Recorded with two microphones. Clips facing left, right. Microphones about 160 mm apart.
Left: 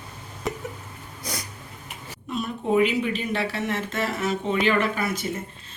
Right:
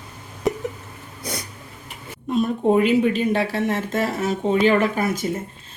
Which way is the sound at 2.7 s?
45° right (ahead or behind).